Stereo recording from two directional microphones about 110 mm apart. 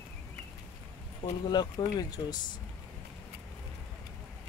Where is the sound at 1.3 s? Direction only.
40° left (ahead or behind).